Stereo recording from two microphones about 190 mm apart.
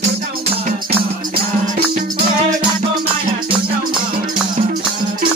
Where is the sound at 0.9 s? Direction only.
30° right (ahead or behind).